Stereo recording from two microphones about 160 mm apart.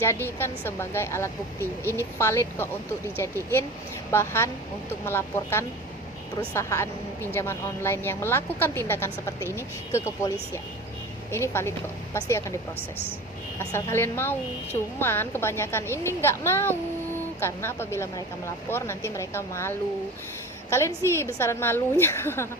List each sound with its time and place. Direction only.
0.0 s a woman's voice: 15° left (ahead or behind)
13.6 s a woman's voice: 15° left (ahead or behind)